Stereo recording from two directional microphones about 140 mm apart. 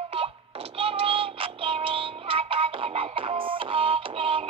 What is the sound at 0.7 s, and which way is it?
Music, 40° right (ahead or behind).